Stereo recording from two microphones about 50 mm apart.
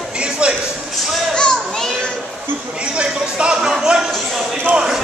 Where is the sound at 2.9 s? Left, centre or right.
Right.